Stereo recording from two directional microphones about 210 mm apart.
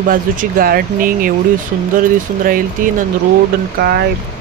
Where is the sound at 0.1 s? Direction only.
45° right (ahead or behind).